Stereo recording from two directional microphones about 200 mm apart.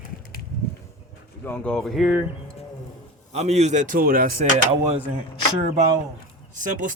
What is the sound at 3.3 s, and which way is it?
Speech, 35° right (ahead or behind).